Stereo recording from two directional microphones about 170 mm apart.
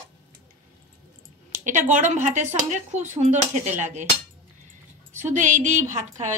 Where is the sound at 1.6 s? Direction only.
45° right (ahead or behind).